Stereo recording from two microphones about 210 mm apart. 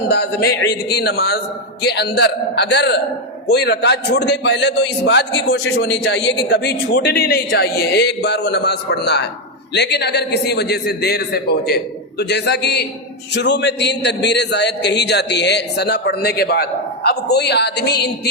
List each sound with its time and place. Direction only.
0.1 s a man's voice: 50° left (ahead or behind)